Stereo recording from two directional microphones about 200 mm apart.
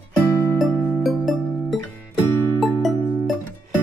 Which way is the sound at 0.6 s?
Centre (ahead or behind).